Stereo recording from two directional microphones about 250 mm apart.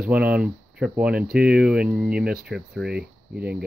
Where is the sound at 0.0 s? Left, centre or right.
Centre.